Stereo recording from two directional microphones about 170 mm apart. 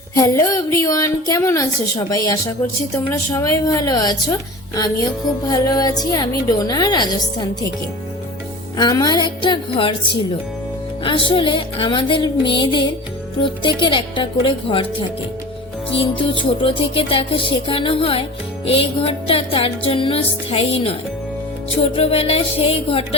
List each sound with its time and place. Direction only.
0.2 s a woman's voice: 15° left (ahead or behind)
8.8 s a woman's voice: 25° left (ahead or behind)
15.9 s music: 35° left (ahead or behind)
21.9 s music: 35° left (ahead or behind)